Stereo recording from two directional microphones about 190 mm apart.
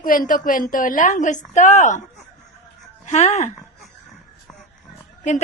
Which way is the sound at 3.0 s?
35° left (ahead or behind).